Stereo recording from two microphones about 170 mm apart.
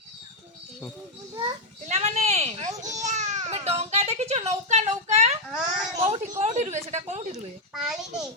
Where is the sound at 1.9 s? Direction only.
40° right (ahead or behind).